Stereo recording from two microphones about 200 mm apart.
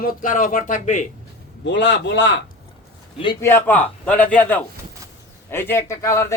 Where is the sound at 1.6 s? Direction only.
60° left (ahead or behind).